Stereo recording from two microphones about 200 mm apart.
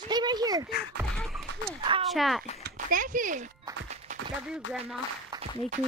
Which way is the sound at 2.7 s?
40° right (ahead or behind).